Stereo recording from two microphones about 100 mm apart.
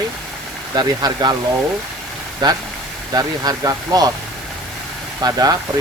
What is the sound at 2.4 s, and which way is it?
Speech, 45° right (ahead or behind).